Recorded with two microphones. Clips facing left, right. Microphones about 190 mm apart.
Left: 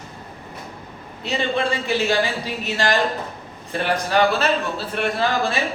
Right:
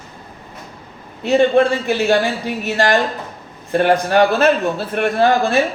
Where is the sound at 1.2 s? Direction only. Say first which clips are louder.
Right 10 dB; 50° right (ahead or behind).